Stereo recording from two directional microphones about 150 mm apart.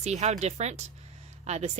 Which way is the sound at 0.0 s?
50° right (ahead or behind).